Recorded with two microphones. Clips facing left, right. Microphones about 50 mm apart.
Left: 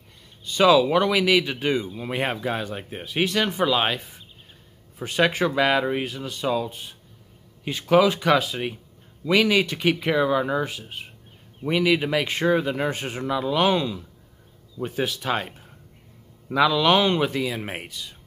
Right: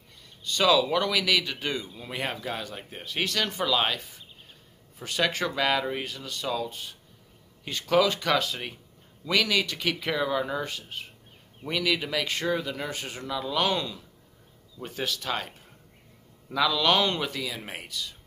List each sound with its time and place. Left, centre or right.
0.4 s speech: centre
16.5 s speech: centre